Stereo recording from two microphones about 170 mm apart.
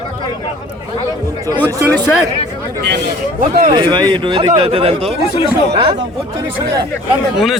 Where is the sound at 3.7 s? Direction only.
25° right (ahead or behind).